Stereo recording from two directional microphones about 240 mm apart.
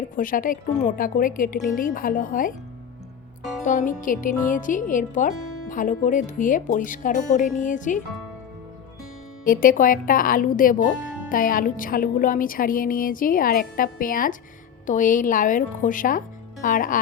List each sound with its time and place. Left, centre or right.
0.2 s speech: left
3.6 s speech: left
9.4 s speech: left